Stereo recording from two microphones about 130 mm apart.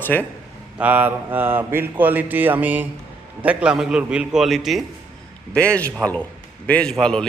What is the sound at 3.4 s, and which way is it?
A man's voice, 10° right (ahead or behind).